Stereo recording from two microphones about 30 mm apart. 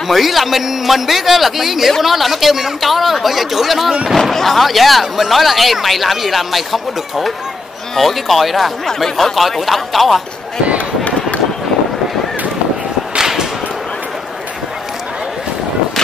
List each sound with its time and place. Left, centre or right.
0.1 s a man's voice: centre
8.8 s speech: centre
13.2 s whip: centre